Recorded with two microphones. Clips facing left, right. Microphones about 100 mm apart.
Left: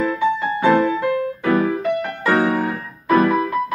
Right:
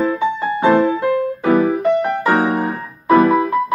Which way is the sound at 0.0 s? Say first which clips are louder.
Right 1 dB; 20° right (ahead or behind).